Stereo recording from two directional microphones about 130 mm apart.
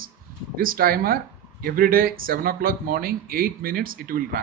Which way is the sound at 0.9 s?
90° right.